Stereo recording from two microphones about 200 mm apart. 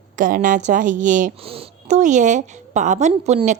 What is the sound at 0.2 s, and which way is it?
A woman's voice, 40° right (ahead or behind).